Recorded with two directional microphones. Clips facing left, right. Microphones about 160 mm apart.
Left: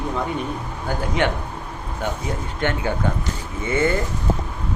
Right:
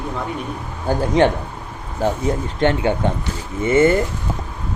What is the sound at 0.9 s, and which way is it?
A man's voice, 30° right (ahead or behind).